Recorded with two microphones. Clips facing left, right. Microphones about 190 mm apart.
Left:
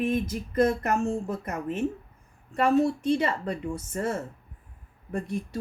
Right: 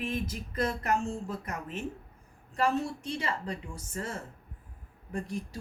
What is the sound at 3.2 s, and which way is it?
Speech, 60° left (ahead or behind).